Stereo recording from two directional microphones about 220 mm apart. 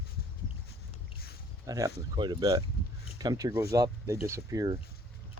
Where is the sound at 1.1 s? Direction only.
45° left (ahead or behind).